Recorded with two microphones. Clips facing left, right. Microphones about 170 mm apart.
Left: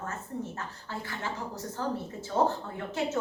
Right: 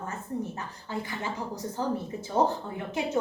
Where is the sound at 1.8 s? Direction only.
15° right (ahead or behind).